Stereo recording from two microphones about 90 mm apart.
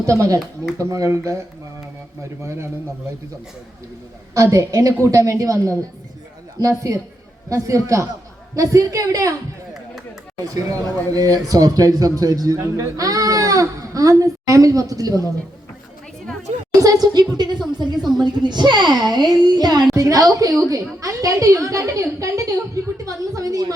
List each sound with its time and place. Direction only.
0.0 s a woman's voice: 40° right (ahead or behind)
2.4 s a woman's voice: 30° right (ahead or behind)
4.4 s a woman's voice: 35° right (ahead or behind)
10.4 s speech: 40° right (ahead or behind)
17.2 s a woman's voice: 55° right (ahead or behind)